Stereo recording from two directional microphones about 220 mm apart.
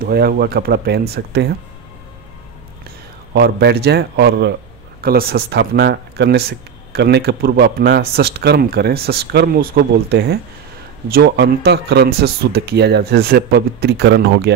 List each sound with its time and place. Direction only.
0.0 s speech: 45° right (ahead or behind)
3.3 s speech: 50° right (ahead or behind)